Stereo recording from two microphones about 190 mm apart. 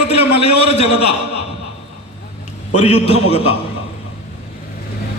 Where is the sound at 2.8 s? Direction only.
35° left (ahead or behind).